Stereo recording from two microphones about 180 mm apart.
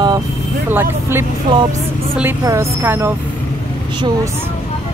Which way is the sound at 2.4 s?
15° right (ahead or behind).